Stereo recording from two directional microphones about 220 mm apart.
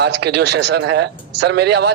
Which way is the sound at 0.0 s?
50° right (ahead or behind).